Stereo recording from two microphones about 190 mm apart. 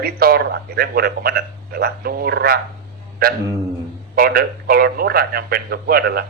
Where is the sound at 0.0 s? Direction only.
50° right (ahead or behind).